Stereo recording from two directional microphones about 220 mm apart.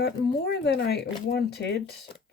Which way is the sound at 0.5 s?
50° left (ahead or behind).